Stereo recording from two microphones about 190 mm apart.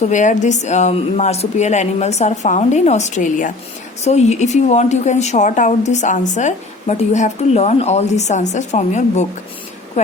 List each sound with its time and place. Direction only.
0.0 s a woman's voice: 40° left (ahead or behind)